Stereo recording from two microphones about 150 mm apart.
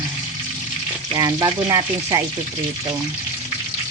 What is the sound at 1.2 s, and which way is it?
Frying, 25° right (ahead or behind).